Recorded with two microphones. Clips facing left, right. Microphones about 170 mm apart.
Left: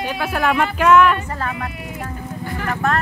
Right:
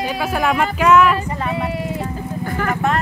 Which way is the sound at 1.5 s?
30° right (ahead or behind).